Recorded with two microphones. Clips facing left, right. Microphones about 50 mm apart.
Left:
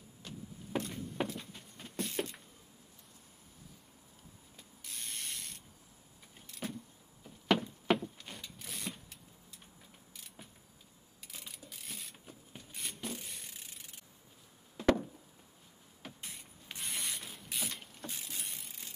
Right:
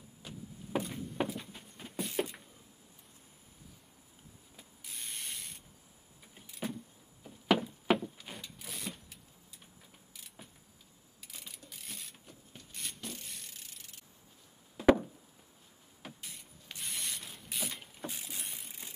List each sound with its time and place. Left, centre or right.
0.2 s a sound: centre
4.6 s sanding: centre
6.3 s vehicle: centre
7.2 s a sound: centre
10.1 s vehicle: centre
11.3 s a sound: centre
12.5 s beatboxing: centre
14.8 s chop: centre
16.0 s vehicle: centre
16.3 s mechanisms: centre
18.7 s mechanisms: centre